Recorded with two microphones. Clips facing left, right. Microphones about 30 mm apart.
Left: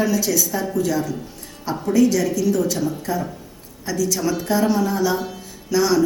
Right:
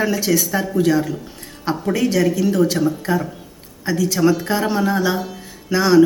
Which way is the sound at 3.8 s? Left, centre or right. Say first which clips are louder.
Right 5 dB; right.